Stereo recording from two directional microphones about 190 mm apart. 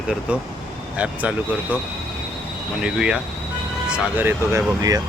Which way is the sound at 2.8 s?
5° right (ahead or behind).